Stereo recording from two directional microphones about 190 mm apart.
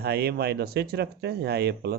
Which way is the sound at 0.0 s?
55° right (ahead or behind).